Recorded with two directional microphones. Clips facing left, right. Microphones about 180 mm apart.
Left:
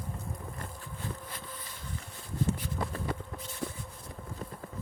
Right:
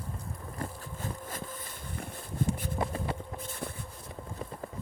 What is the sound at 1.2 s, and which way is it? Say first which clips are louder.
Vehicle: right 4 dB; 45° right (ahead or behind).